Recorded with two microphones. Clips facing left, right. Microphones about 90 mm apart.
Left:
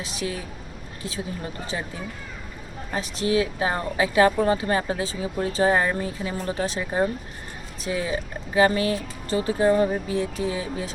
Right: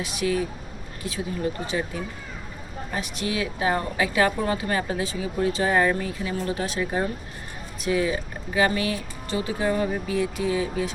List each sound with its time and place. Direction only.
0.0 s a woman's voice: 30° left (ahead or behind)
2.9 s a woman's voice: 30° left (ahead or behind)